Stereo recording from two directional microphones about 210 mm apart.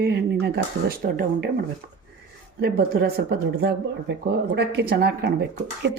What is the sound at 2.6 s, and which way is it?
Speech, 50° right (ahead or behind).